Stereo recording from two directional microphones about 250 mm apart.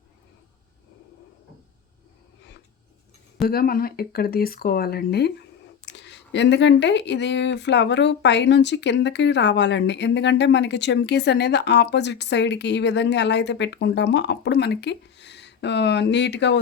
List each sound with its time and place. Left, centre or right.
3.4 s speech: left